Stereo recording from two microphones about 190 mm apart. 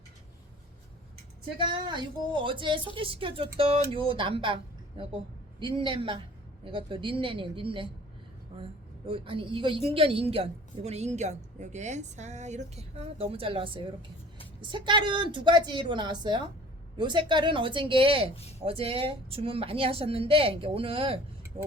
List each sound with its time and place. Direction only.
1.5 s a woman's voice: 25° right (ahead or behind)
9.0 s a woman's voice: 25° right (ahead or behind)
21.5 s vehicle: 30° right (ahead or behind)